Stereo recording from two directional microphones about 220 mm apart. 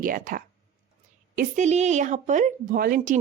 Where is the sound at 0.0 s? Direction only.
40° right (ahead or behind).